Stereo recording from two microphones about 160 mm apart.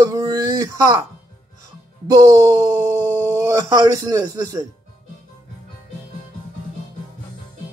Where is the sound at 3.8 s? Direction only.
25° right (ahead or behind).